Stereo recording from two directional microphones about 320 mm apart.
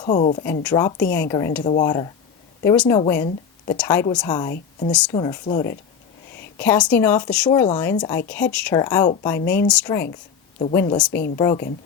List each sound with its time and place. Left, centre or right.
0.0 s speech: left; by 5.1 s centre
5.1 s speech: centre